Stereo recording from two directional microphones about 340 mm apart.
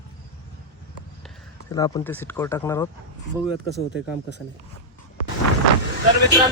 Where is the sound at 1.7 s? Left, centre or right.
Centre.